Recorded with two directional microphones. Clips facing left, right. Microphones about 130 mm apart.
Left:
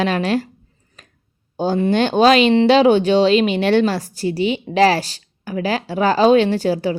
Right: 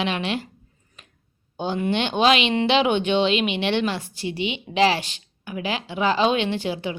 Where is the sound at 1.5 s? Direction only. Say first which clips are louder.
Left 7 dB; 40° left (ahead or behind).